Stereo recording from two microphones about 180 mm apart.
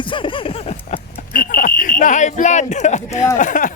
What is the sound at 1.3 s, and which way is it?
Speech, 50° left (ahead or behind).